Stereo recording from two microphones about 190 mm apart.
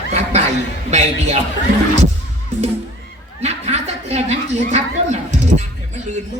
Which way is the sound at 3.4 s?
35° right (ahead or behind).